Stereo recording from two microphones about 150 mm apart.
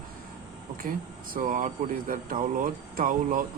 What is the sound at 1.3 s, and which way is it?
Speech, 65° right (ahead or behind).